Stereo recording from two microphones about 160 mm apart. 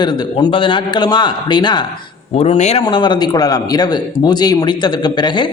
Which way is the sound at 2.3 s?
40° left (ahead or behind).